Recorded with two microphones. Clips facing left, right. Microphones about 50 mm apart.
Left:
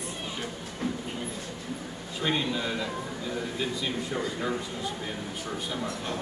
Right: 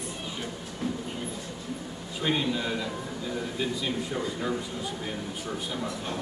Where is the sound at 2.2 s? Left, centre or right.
Centre.